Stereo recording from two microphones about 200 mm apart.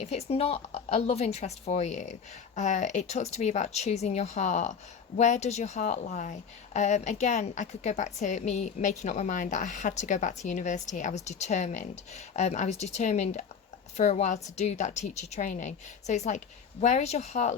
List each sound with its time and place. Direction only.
0.0 s a woman's voice: 35° left (ahead or behind)